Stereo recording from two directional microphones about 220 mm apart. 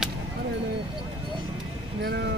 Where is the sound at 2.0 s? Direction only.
50° right (ahead or behind).